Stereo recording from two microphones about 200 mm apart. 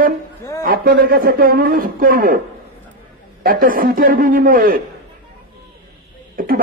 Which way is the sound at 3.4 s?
45° right (ahead or behind).